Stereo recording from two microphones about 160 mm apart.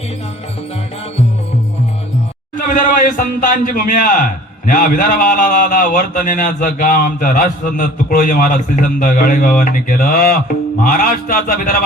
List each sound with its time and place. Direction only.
2.6 s a man's voice: 55° left (ahead or behind)